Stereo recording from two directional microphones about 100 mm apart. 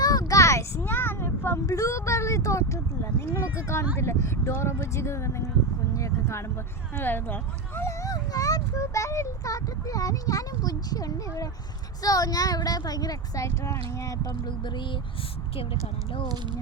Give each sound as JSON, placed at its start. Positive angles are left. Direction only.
{"t": 0.0, "sound": "child singing", "side_deg": 35}
{"t": 0.9, "sound": "speech", "side_deg": 20}
{"t": 5.9, "sound": "a sound", "side_deg": 30}
{"t": 6.9, "sound": "speech", "side_deg": 20}
{"t": 7.8, "sound": "speech", "side_deg": 30}
{"t": 14.4, "sound": "speech", "side_deg": 50}
{"t": 15.5, "sound": "speech", "side_deg": 65}